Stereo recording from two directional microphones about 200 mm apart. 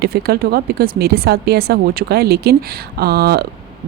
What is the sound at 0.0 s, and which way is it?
A woman's voice, 50° right (ahead or behind).